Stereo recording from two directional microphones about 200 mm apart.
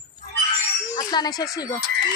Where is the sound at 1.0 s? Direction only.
20° left (ahead or behind).